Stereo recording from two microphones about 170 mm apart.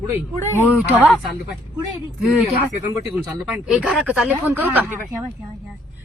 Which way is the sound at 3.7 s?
Centre (ahead or behind).